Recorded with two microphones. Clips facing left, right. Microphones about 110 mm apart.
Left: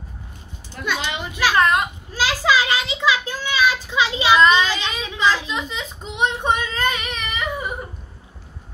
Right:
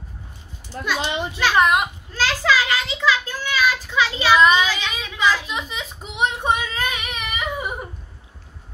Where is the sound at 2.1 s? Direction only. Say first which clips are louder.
Left 1 dB; 15° left (ahead or behind).